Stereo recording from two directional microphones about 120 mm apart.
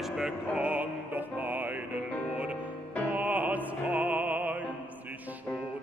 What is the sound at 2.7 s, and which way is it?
Music, 10° left (ahead or behind).